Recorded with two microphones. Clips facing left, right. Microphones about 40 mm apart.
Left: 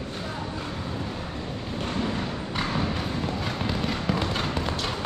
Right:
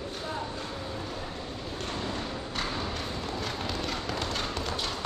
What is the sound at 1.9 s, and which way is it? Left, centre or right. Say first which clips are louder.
Thump: left 6 dB; centre.